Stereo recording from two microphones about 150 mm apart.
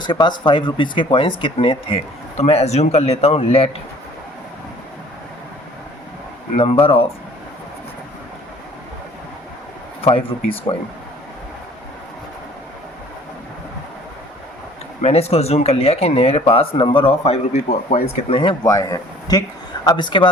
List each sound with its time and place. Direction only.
0.0 s speech: 30° left (ahead or behind)
6.6 s speech: 40° left (ahead or behind)
10.0 s speech: 40° left (ahead or behind)
15.0 s speech: 45° left (ahead or behind)